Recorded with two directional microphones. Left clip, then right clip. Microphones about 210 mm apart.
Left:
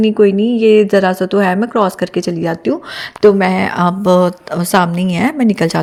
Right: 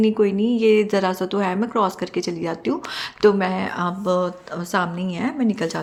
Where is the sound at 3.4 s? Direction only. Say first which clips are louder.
Left 9 dB; 40° left (ahead or behind).